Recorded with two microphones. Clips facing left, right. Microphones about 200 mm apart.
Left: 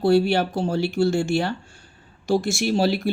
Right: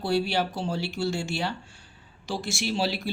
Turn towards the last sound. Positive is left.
turn(degrees=50)  # may be behind; listen again after turning